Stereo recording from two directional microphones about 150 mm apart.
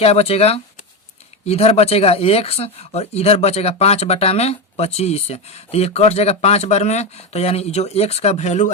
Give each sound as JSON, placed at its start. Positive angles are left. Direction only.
{"t": 0.0, "sound": "speech", "side_deg": 45}